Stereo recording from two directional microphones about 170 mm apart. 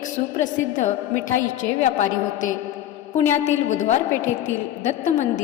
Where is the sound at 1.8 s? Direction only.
45° left (ahead or behind).